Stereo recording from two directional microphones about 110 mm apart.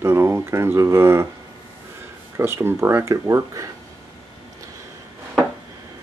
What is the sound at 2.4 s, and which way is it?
Speech, 20° right (ahead or behind).